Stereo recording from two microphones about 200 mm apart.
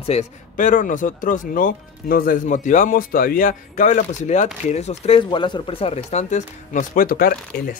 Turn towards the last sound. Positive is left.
turn(degrees=45)  # may be behind; listen again after turning